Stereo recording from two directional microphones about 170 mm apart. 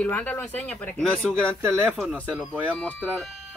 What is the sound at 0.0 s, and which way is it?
Speech, 10° left (ahead or behind).